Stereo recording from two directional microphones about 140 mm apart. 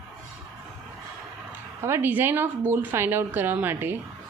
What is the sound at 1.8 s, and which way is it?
A woman's voice, 20° right (ahead or behind).